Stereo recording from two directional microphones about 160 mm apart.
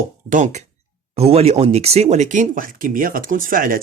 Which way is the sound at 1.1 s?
40° right (ahead or behind).